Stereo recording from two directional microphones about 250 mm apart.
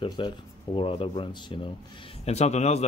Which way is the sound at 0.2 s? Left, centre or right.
Centre.